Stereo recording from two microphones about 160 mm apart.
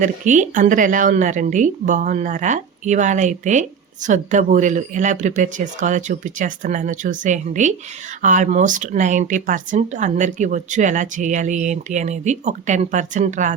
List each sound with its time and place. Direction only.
0.0 s speech: 50° right (ahead or behind)